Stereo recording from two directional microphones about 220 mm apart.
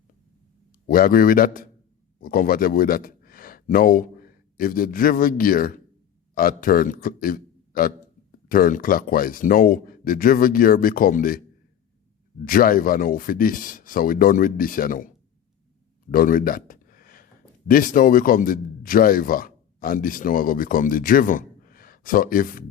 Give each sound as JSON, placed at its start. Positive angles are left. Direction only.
{"t": 0.9, "sound": "a man's voice", "side_deg": 40}
{"t": 12.5, "sound": "a man's voice", "side_deg": 40}
{"t": 16.1, "sound": "a sound", "side_deg": 40}
{"t": 17.7, "sound": "speech", "side_deg": 40}